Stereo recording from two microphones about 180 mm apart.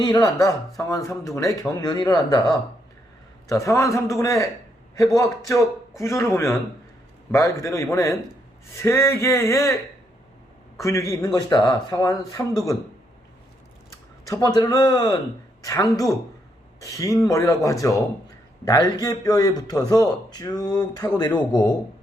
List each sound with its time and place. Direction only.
0.0 s a man's voice: 20° left (ahead or behind)
3.5 s a man's voice: 15° left (ahead or behind)
10.8 s a man's voice: 15° left (ahead or behind)
14.3 s a man's voice: 20° left (ahead or behind)